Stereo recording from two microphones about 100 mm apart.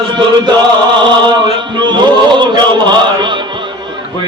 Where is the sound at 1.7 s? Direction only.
50° right (ahead or behind).